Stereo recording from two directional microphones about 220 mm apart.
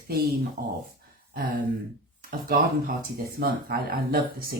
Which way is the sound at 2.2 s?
40° right (ahead or behind).